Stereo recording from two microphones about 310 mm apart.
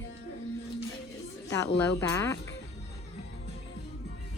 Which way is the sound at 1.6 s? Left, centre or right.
Centre.